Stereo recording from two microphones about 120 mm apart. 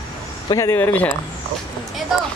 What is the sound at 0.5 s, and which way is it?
Speech, 25° left (ahead or behind).